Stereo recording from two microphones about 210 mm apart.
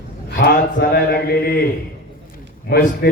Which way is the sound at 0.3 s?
50° left (ahead or behind).